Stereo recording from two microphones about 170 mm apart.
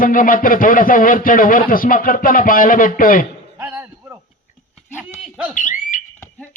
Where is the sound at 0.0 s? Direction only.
55° left (ahead or behind).